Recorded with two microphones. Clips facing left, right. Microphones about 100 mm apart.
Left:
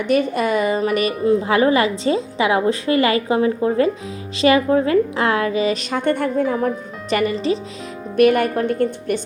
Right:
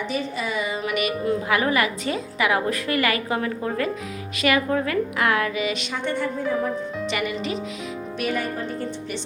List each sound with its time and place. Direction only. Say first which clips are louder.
0.1 s a woman's voice: left 14 dB; 55° left (ahead or behind)
7.1 s a woman's voice: left 10 dB; 35° left (ahead or behind)
8.1 s a woman's voice: left 13 dB; 60° left (ahead or behind)